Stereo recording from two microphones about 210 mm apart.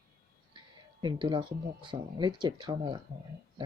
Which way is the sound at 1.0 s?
20° right (ahead or behind).